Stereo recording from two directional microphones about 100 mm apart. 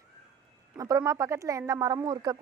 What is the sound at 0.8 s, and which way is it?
Speech, 35° right (ahead or behind).